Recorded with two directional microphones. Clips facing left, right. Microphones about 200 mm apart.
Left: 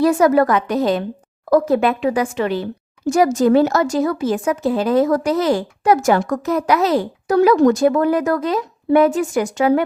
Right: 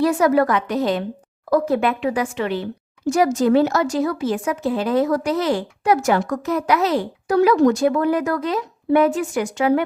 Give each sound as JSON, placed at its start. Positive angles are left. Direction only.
{"t": 0.0, "sound": "a woman's voice", "side_deg": 45}